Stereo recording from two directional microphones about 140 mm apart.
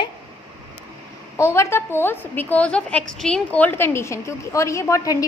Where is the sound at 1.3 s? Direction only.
20° left (ahead or behind).